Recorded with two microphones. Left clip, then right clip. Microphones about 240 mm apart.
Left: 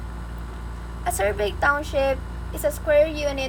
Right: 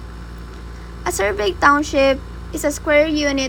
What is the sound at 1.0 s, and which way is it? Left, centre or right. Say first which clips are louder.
A woman's voice: right 4 dB; right.